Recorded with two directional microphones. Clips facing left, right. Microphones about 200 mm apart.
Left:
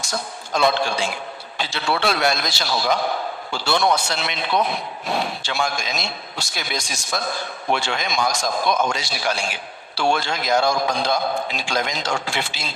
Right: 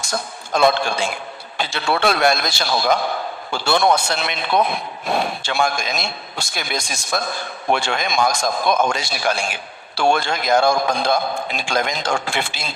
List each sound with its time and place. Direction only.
0.0 s a man's voice: 50° right (ahead or behind)